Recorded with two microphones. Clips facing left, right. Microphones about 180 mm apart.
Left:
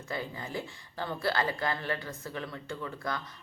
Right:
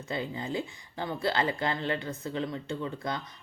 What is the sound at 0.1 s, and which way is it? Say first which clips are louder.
Speech: right 4 dB; 20° right (ahead or behind).